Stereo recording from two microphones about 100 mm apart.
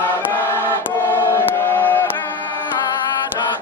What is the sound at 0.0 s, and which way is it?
Music, 20° left (ahead or behind).